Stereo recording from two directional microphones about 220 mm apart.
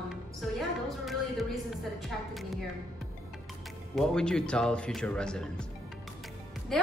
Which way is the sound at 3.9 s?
5° left (ahead or behind).